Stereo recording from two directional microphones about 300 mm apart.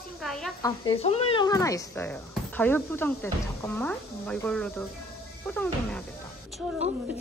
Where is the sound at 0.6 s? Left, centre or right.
Centre.